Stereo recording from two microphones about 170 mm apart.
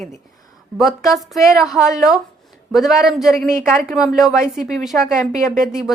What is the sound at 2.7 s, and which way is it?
A woman's voice, centre (ahead or behind).